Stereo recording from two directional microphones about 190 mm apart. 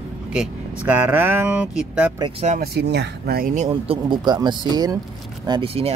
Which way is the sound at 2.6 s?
60° right (ahead or behind).